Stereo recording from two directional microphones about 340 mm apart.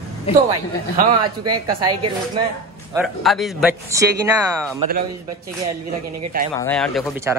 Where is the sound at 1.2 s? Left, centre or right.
Right.